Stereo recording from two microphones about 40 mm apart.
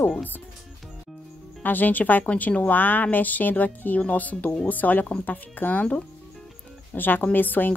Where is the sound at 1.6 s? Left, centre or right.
Left.